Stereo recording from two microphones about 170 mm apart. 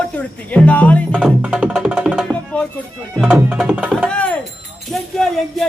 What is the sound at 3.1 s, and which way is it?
Speech, centre (ahead or behind).